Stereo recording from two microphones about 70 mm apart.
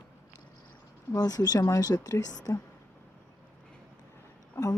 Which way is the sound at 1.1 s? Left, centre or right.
Left.